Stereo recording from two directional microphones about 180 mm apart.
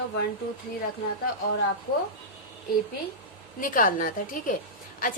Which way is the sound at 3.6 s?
50° left (ahead or behind).